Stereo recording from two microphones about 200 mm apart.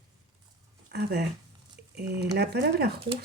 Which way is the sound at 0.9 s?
55° right (ahead or behind).